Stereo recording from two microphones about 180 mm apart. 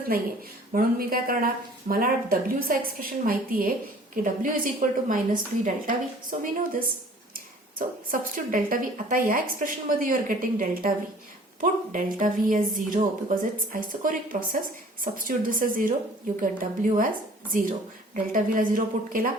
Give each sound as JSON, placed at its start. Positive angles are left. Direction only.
{"t": 0.7, "sound": "speech", "side_deg": -55}
{"t": 7.3, "sound": "speech", "side_deg": -50}